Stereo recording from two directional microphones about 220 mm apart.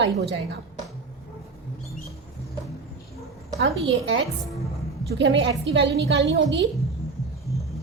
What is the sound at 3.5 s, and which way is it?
A woman's voice, 55° right (ahead or behind).